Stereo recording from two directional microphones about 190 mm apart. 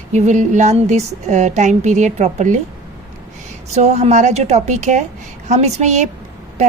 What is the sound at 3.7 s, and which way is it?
A woman's voice, 35° right (ahead or behind).